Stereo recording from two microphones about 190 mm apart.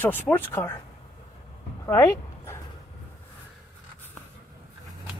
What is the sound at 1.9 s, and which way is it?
Dog, 15° left (ahead or behind).